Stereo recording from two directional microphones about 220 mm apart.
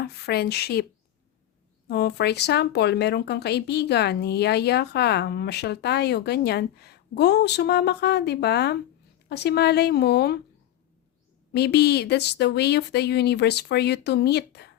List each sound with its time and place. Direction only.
0.1 s speech: 45° left (ahead or behind)
1.9 s speech: 50° left (ahead or behind)
11.5 s speech: 50° left (ahead or behind)